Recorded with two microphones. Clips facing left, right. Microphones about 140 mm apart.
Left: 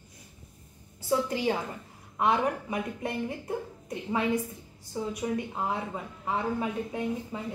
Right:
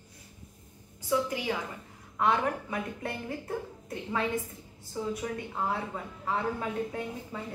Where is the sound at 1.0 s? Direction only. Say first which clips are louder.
Left 2 dB; 35° left (ahead or behind).